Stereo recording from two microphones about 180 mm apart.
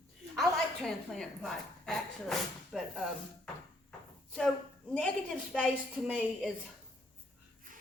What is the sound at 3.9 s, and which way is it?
Drawer open or close, 5° left (ahead or behind).